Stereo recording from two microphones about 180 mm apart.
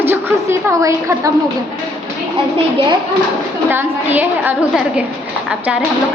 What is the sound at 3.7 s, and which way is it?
A woman's voice, 10° right (ahead or behind).